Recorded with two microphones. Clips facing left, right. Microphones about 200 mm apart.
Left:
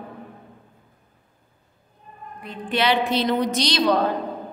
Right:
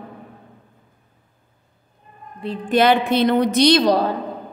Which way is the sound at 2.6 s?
50° right (ahead or behind).